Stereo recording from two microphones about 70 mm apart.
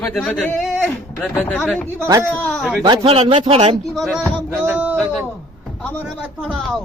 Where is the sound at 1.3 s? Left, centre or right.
Left.